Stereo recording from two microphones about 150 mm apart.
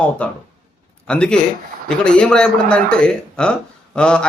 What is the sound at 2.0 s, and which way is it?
Speech, 5° left (ahead or behind).